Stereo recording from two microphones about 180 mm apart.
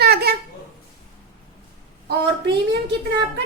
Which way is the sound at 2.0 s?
70° right (ahead or behind).